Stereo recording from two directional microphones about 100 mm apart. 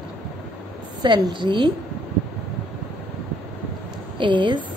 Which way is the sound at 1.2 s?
50° right (ahead or behind).